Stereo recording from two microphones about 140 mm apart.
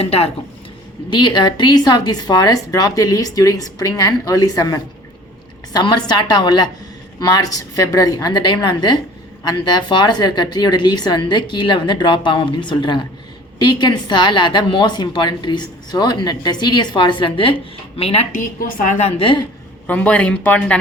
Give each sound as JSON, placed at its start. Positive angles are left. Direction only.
{"t": 0.0, "sound": "a woman's voice", "side_deg": 45}
{"t": 1.1, "sound": "a woman's voice", "side_deg": 35}
{"t": 18.3, "sound": "a woman's voice", "side_deg": 70}
{"t": 18.9, "sound": "a woman's voice", "side_deg": 45}
{"t": 19.9, "sound": "speech", "side_deg": 10}